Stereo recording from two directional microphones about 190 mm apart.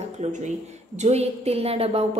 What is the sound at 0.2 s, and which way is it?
A woman's voice, 40° right (ahead or behind).